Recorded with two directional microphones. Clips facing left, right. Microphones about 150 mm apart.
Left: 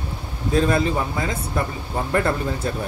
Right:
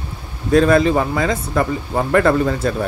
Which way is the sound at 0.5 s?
80° right.